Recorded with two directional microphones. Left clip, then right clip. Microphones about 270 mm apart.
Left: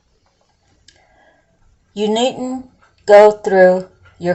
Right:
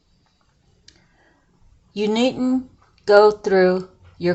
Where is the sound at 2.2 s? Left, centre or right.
Right.